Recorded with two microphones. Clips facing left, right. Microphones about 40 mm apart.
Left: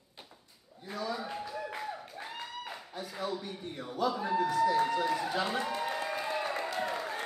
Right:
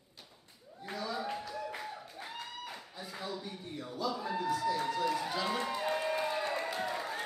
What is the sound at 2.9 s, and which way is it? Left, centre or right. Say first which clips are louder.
A man's voice: left 6 dB; left.